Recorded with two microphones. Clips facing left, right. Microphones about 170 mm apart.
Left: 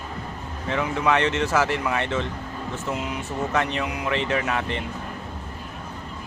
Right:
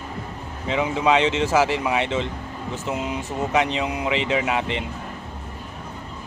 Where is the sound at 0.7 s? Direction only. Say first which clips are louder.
Right 3 dB; 15° right (ahead or behind).